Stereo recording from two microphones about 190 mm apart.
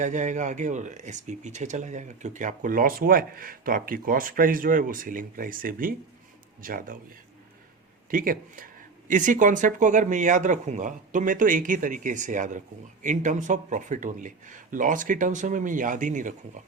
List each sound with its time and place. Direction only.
0.0 s speech: 40° right (ahead or behind)
8.1 s speech: 45° right (ahead or behind)